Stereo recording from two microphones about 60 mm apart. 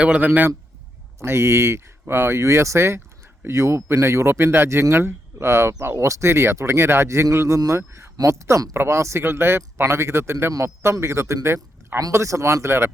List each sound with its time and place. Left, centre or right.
0.0 s a man's voice: right
1.2 s speech: right
9.2 s speech: right